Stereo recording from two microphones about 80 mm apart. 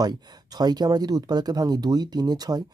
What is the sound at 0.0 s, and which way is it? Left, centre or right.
Speech, right.